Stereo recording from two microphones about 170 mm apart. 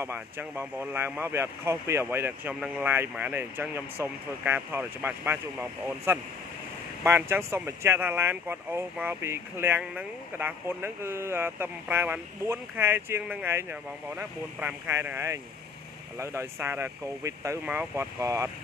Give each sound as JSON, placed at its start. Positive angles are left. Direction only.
{"t": 0.0, "sound": "speech", "side_deg": -15}